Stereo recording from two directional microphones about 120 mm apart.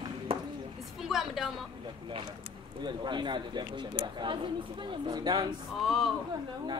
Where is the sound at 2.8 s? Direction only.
40° right (ahead or behind).